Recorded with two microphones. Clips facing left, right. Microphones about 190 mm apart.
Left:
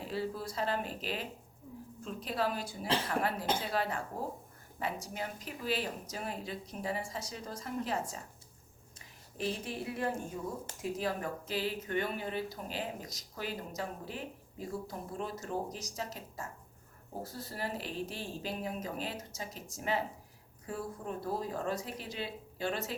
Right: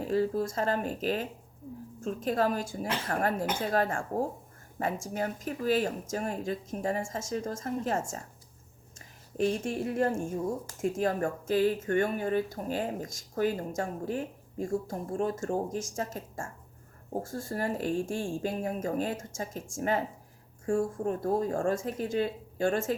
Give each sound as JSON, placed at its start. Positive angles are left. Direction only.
{"t": 0.0, "sound": "speech", "side_deg": -45}